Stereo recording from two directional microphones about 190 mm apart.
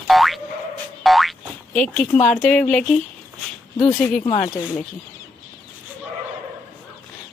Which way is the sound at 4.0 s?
5° left (ahead or behind).